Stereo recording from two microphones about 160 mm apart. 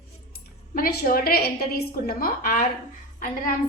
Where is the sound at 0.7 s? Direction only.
70° left (ahead or behind).